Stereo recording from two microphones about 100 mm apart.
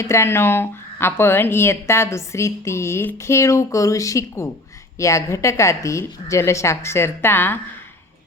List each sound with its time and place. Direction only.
0.0 s speech: 30° left (ahead or behind)